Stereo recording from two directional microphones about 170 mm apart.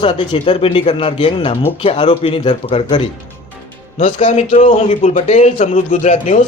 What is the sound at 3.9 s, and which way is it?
A man's voice, 45° left (ahead or behind).